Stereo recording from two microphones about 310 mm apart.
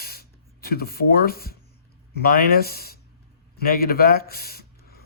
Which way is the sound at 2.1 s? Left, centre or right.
Left.